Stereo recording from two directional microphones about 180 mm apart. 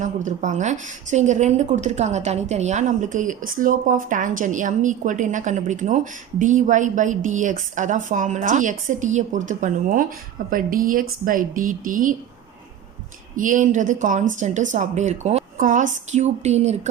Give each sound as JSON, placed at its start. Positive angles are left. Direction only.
{"t": 0.0, "sound": "a woman's voice", "side_deg": -45}
{"t": 13.3, "sound": "a woman's voice", "side_deg": -45}